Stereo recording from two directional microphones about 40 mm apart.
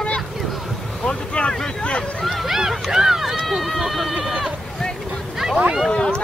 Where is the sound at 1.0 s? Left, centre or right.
Left.